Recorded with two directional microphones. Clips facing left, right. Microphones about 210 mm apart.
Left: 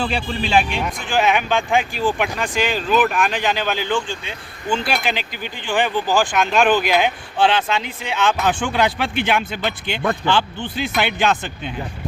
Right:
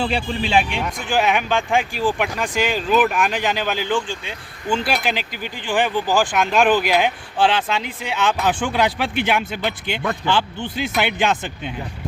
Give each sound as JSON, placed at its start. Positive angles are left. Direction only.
{"t": 0.0, "sound": "speech", "side_deg": -25}
{"t": 1.0, "sound": "speech", "side_deg": -5}